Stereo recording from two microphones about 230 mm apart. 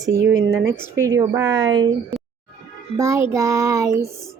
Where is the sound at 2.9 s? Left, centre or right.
Centre.